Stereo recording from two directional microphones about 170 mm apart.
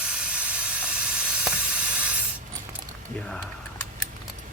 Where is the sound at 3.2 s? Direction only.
5° left (ahead or behind).